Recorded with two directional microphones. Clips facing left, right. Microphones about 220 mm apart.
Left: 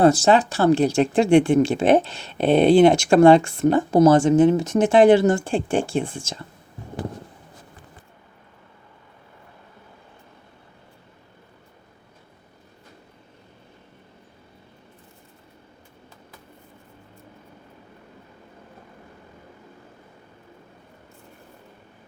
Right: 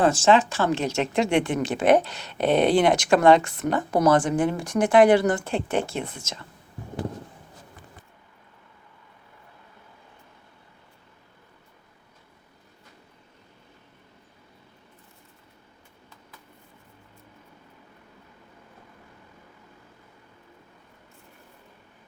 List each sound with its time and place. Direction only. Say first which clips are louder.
0.0 s speech: left 3 dB; 35° left (ahead or behind)